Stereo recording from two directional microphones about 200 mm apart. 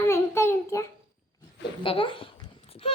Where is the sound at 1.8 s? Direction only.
25° left (ahead or behind).